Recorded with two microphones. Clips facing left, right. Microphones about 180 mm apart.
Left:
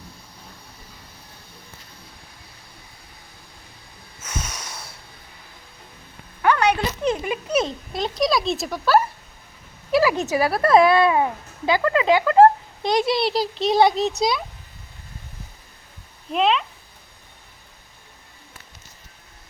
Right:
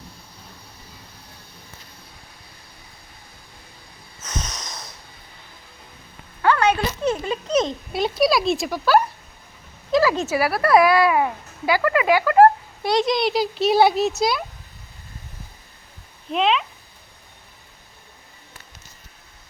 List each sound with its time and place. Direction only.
4.2 s snort: 10° left (ahead or behind)
6.4 s a sound: 15° left (ahead or behind)
7.9 s speech: 5° right (ahead or behind)
9.9 s a child's voice: 15° left (ahead or behind)
13.1 s speech: centre (ahead or behind)
16.3 s speech: centre (ahead or behind)